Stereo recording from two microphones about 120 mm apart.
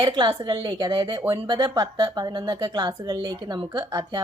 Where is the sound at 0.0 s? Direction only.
40° right (ahead or behind).